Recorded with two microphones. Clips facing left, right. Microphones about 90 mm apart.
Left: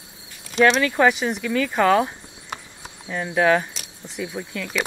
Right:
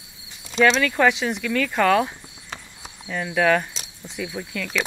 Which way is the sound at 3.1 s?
15° left (ahead or behind).